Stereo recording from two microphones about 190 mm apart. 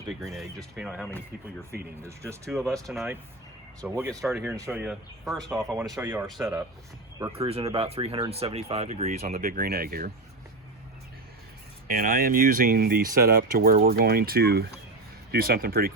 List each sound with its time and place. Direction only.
0.1 s speech: centre (ahead or behind)
1.8 s speech: 15° right (ahead or behind)
2.8 s speech: centre (ahead or behind)
4.1 s speech: centre (ahead or behind)
4.5 s speech: 15° right (ahead or behind)
5.5 s speech: 15° right (ahead or behind)
7.3 s speech: 30° right (ahead or behind); by 10.1 s 50° right (ahead or behind)
11.9 s speech: 50° right (ahead or behind)